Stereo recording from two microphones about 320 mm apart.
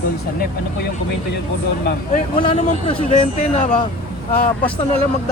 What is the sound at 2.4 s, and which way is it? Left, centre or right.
A man's voice, centre.